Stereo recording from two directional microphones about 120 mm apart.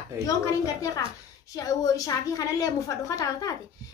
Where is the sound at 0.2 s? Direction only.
25° left (ahead or behind).